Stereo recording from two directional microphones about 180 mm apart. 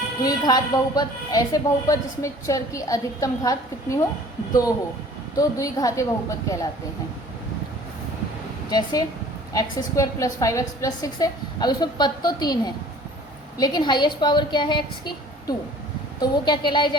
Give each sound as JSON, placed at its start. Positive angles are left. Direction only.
{"t": 0.2, "sound": "a woman's voice", "side_deg": 20}
{"t": 5.4, "sound": "a woman's voice", "side_deg": 20}
{"t": 8.7, "sound": "a woman's voice", "side_deg": 20}